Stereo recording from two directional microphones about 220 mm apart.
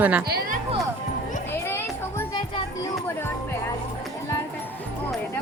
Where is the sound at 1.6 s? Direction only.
10° left (ahead or behind).